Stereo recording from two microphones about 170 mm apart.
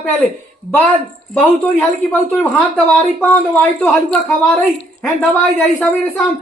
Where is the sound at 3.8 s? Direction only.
10° left (ahead or behind).